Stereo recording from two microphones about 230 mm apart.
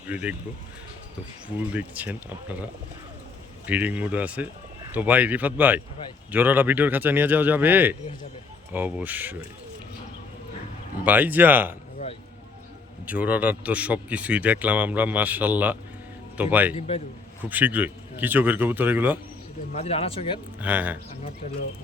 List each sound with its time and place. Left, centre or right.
0.1 s speech: centre
1.7 s speech: centre
3.7 s speech: centre
11.0 s speech: centre
13.1 s speech: centre
16.7 s speech: left
17.5 s speech: centre
19.7 s speech: left
20.6 s speech: centre